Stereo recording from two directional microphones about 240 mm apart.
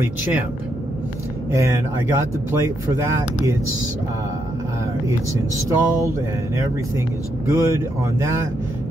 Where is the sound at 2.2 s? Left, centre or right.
Centre.